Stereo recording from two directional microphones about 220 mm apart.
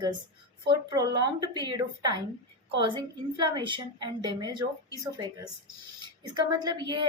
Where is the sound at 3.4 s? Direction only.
20° right (ahead or behind).